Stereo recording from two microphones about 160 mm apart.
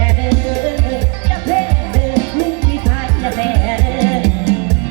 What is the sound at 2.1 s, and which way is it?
Music, 25° left (ahead or behind).